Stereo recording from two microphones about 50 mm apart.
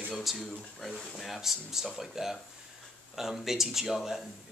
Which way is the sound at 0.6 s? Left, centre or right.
Centre.